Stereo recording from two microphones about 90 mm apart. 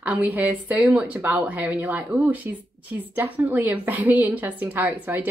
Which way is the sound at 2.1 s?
35° right (ahead or behind).